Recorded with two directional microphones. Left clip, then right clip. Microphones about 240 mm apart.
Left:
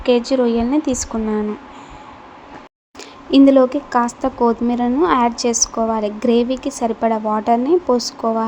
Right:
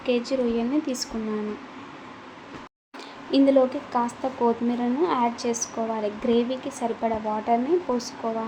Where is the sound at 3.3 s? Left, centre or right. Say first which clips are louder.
Left 8 dB; left.